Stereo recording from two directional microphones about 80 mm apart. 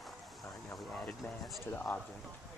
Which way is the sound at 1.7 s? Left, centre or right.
Left.